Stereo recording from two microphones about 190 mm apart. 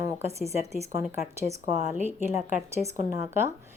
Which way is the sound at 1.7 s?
35° left (ahead or behind).